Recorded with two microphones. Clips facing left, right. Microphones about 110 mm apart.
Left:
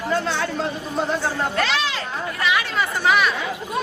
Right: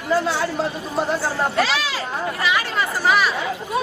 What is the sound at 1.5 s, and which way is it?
Speech, 5° right (ahead or behind).